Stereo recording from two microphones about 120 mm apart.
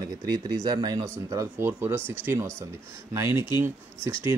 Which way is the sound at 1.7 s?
20° right (ahead or behind).